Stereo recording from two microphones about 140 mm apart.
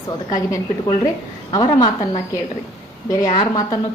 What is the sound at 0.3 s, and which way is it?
A woman's voice, 25° left (ahead or behind).